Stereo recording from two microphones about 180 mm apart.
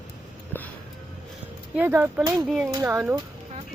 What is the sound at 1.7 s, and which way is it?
Speech, 10° right (ahead or behind).